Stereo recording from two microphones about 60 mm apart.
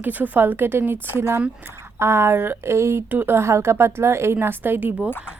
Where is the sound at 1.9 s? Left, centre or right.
Right.